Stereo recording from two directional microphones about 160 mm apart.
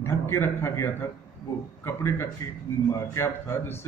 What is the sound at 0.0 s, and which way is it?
A man's voice, 15° left (ahead or behind).